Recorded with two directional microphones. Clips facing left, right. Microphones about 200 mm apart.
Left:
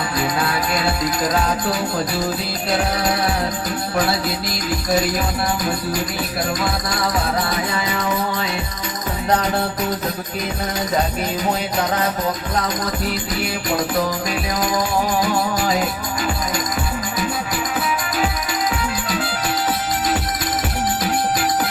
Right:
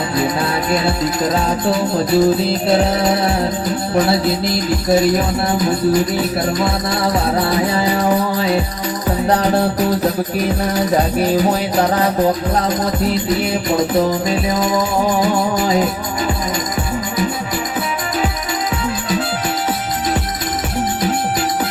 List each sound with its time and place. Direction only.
0.2 s music: 25° right (ahead or behind)
2.0 s music: 25° right (ahead or behind)
6.9 s music: 30° right (ahead or behind)
12.6 s music: 25° right (ahead or behind)